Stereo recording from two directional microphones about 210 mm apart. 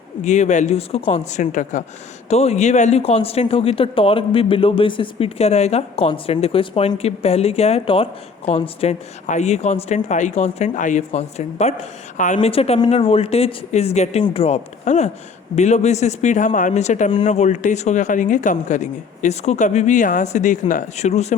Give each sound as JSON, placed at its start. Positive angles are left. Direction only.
{"t": 0.3, "sound": "speech", "side_deg": 35}